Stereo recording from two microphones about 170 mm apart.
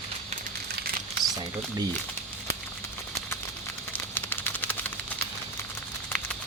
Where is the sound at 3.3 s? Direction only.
15° left (ahead or behind).